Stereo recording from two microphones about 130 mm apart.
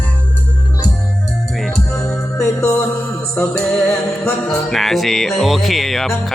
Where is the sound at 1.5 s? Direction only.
Centre (ahead or behind).